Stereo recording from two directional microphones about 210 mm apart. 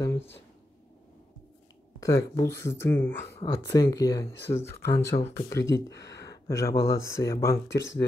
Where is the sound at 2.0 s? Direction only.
15° left (ahead or behind).